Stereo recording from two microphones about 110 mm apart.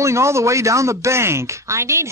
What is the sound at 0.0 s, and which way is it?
A man's voice, 25° right (ahead or behind).